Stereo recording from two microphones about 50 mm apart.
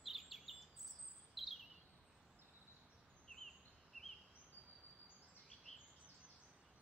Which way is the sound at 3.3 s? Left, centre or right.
Centre.